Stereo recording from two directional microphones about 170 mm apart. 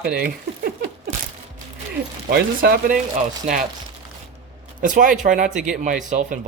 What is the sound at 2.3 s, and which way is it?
Speech, 70° right (ahead or behind).